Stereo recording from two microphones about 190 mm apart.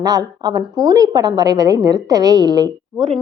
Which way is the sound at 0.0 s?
20° right (ahead or behind).